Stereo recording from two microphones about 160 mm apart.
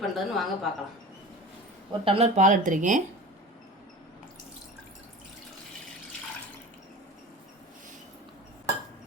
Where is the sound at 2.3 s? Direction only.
55° right (ahead or behind).